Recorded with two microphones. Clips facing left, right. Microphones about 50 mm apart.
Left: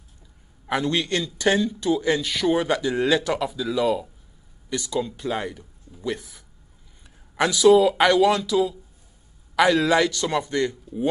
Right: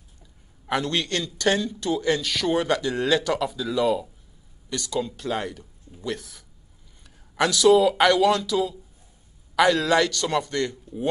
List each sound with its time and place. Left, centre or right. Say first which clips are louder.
0.7 s a man's voice: left 2 dB; centre
4.6 s a man's voice: left 1 dB; centre